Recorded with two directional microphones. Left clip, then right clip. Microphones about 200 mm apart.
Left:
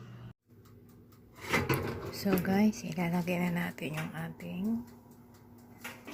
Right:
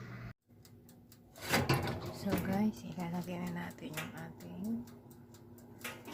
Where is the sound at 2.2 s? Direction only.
15° left (ahead or behind).